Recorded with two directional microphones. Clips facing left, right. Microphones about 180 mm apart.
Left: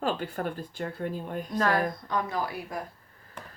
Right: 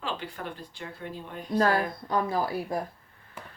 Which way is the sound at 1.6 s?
30° right (ahead or behind).